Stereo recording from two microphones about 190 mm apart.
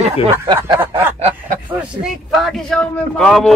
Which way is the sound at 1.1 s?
35° right (ahead or behind).